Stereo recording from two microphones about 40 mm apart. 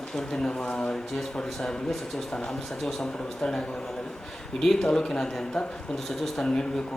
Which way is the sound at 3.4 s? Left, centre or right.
Centre.